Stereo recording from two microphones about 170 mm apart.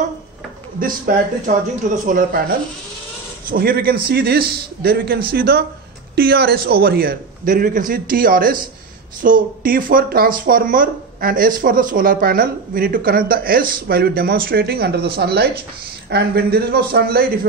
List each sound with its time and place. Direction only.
0.7 s speech: 55° right (ahead or behind)
3.4 s a man's voice: 60° right (ahead or behind)